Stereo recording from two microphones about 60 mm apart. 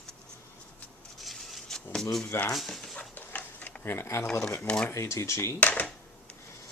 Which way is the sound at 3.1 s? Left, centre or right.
Left.